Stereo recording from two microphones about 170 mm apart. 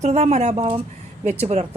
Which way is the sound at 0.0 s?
40° right (ahead or behind).